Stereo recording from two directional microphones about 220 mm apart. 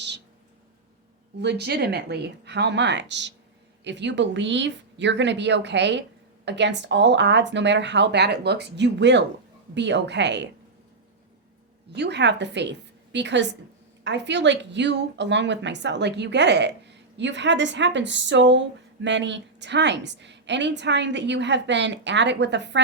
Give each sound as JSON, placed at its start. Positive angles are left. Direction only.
{"t": 1.4, "sound": "speech", "side_deg": -50}
{"t": 11.9, "sound": "speech", "side_deg": -50}